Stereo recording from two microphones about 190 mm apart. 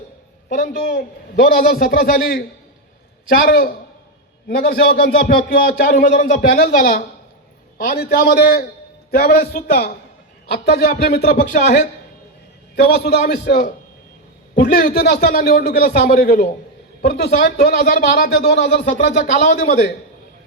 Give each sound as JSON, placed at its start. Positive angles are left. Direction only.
{"t": 0.4, "sound": "speech", "side_deg": 45}
{"t": 13.0, "sound": "a man's voice", "side_deg": 55}
{"t": 19.0, "sound": "a man's voice", "side_deg": 40}